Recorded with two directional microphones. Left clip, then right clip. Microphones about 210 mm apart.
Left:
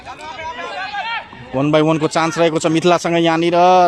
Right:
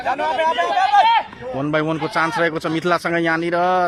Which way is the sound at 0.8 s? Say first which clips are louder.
Right 10 dB; 35° right (ahead or behind).